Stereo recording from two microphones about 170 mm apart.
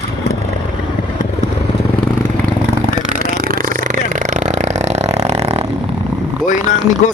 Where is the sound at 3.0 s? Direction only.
55° right (ahead or behind).